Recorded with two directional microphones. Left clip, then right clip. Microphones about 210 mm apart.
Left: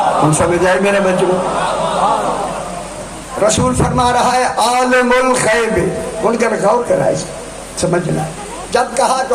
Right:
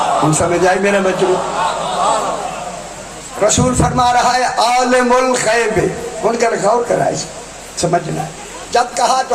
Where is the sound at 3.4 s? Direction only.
25° left (ahead or behind).